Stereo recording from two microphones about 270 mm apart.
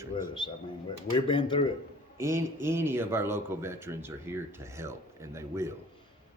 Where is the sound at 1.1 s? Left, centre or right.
Centre.